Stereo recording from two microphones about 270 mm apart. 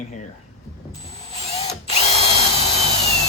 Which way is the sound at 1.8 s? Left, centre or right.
Left.